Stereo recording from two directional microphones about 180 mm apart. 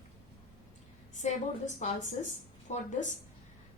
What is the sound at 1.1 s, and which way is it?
A woman's voice, 40° left (ahead or behind).